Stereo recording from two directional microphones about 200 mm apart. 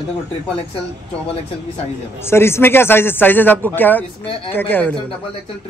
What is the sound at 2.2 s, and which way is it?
Speech, 10° left (ahead or behind).